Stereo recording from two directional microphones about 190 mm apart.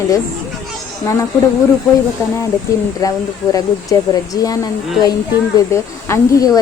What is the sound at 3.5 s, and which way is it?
Speech, 20° left (ahead or behind).